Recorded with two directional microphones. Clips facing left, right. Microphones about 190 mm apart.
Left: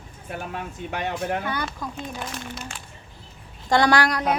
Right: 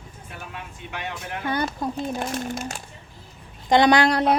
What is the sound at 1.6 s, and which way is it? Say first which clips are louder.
Speech: right 5 dB; 40° right (ahead or behind).